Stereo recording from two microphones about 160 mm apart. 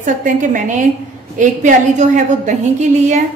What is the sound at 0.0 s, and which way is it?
A woman's voice, 55° right (ahead or behind).